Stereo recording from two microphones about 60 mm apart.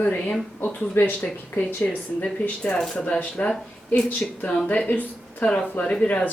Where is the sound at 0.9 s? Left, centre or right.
Left.